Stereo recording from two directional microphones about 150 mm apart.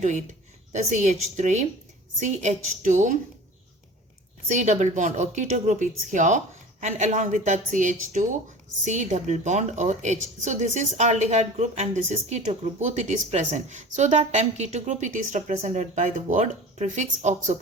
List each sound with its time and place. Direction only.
0.7 s a woman's voice: 50° right (ahead or behind)
4.4 s a woman's voice: 50° right (ahead or behind)